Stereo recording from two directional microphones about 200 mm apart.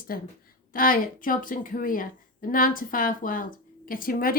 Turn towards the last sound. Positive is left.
turn(degrees=45)  # may be behind; listen again after turning